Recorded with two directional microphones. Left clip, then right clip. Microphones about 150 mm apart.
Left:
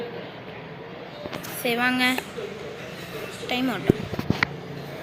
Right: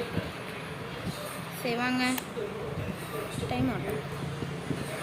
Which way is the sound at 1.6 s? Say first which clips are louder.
Left 7 dB; 10° left (ahead or behind).